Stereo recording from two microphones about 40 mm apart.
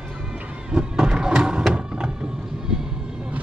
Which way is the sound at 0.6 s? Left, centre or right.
Centre.